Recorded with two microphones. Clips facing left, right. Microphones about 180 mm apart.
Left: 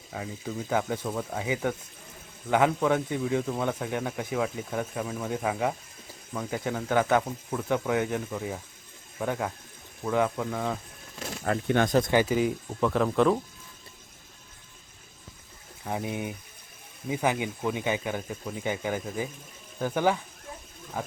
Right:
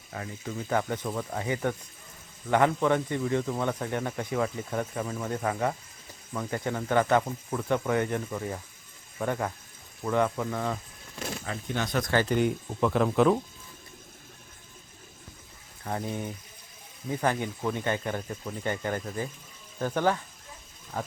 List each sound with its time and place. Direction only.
0.1 s a man's voice: 10° left (ahead or behind)
11.4 s speech: 60° left (ahead or behind)
12.1 s a man's voice: 5° left (ahead or behind)
15.8 s speech: 10° left (ahead or behind)